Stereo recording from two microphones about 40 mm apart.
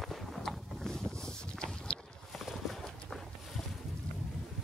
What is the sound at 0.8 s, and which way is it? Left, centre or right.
Boat, centre.